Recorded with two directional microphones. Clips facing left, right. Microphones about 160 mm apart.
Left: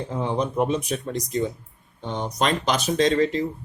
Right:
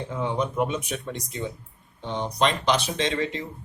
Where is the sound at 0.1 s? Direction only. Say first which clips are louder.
Left 2 dB; 35° left (ahead or behind).